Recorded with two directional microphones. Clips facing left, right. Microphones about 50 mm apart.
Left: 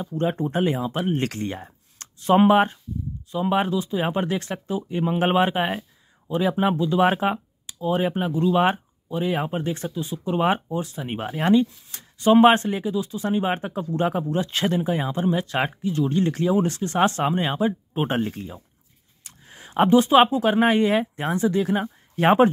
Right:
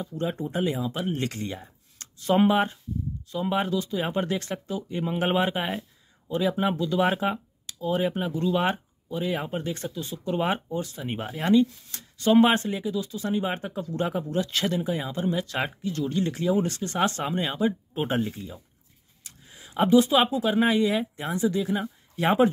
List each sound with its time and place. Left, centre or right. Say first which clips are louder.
0.0 s speech: left 5 dB; left
3.3 s speech: left 4 dB; left
6.2 s speech: left 3 dB; left
7.0 s speech: left 4 dB; left
11.1 s speech: left 2 dB; left